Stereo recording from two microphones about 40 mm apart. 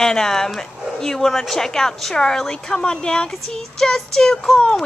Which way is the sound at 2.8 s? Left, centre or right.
Left.